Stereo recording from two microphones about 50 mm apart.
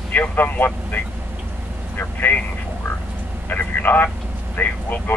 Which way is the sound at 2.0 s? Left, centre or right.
Left.